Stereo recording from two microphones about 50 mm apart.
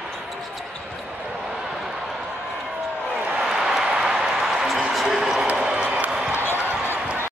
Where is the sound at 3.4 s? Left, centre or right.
Centre.